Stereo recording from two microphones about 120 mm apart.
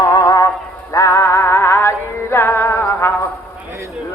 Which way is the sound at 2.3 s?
20° left (ahead or behind).